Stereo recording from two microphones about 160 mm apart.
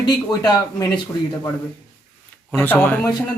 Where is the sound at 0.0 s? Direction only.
25° left (ahead or behind).